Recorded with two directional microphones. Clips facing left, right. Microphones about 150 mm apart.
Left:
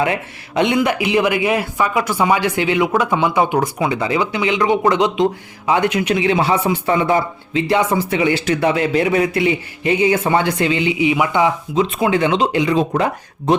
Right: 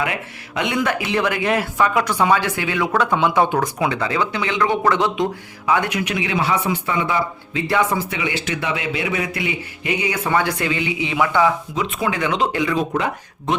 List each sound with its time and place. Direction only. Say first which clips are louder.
0.0 s speech: left 5 dB; 30° left (ahead or behind)
0.8 s a man's voice: left 4 dB; 15° left (ahead or behind)